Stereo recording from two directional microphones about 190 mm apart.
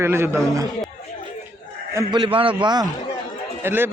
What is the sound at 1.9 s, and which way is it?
A man's voice, 25° right (ahead or behind).